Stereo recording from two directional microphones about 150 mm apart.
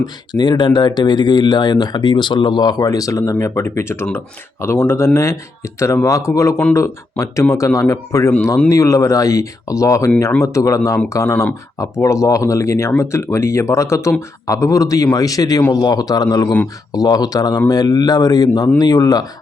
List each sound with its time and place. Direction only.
0.0 s speech: 30° left (ahead or behind)